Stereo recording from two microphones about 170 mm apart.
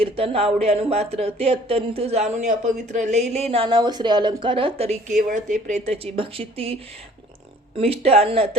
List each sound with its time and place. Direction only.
0.0 s a woman's voice: 35° right (ahead or behind)
7.8 s a woman's voice: 35° right (ahead or behind)